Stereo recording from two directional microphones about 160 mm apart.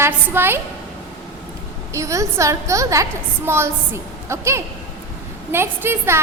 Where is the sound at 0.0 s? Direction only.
15° right (ahead or behind).